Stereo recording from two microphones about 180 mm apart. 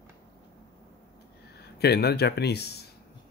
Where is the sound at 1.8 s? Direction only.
65° left (ahead or behind).